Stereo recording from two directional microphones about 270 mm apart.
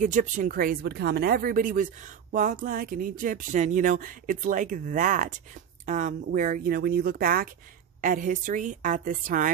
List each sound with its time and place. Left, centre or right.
0.0 s a woman's voice: right